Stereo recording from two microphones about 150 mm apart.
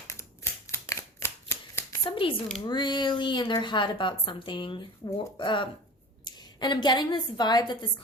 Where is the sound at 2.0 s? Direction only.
35° left (ahead or behind).